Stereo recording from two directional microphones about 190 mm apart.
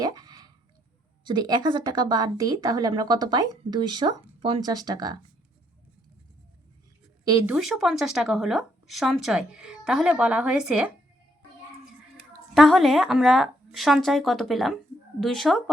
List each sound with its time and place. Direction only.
0.0 s a sound: 20° right (ahead or behind)
1.2 s a woman's voice: 25° right (ahead or behind)
7.4 s speech: 5° right (ahead or behind)
12.5 s speech: centre (ahead or behind)